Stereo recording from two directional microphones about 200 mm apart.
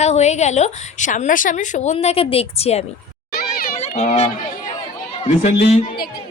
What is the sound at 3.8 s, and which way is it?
Speech, 35° left (ahead or behind).